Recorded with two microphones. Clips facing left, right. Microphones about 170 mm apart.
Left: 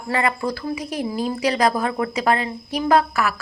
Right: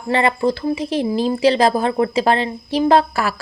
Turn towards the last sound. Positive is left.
turn(degrees=-30)  # may be behind; listen again after turning